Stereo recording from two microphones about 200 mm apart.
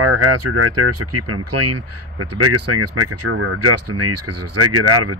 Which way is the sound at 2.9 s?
90° right.